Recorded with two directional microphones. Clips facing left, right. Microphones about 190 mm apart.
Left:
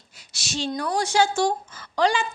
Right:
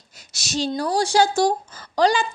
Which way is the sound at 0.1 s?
40° right (ahead or behind).